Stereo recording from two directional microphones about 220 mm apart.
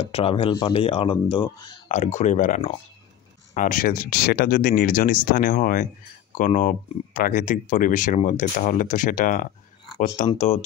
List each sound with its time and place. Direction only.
0.0 s speech: 25° left (ahead or behind)